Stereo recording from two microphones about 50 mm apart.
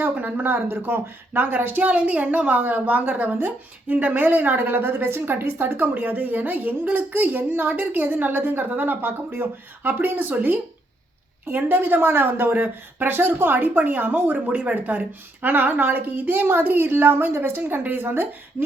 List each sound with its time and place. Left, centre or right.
0.0 s a woman's voice: right